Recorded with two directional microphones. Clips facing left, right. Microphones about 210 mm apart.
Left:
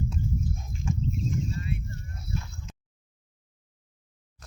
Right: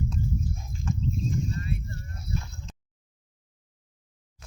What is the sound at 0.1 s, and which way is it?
Dog, 10° left (ahead or behind).